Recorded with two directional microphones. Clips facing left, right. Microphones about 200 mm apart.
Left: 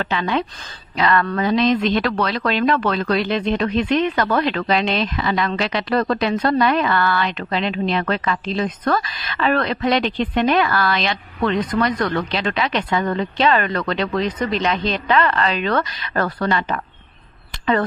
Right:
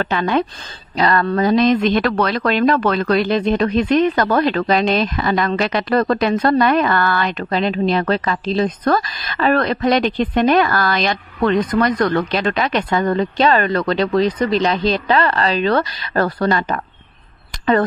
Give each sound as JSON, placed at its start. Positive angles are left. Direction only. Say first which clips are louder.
{"t": 0.0, "sound": "a woman's voice", "louder": "right 4 dB", "side_deg": -50}
{"t": 0.9, "sound": "speech", "louder": "right 2 dB", "side_deg": -35}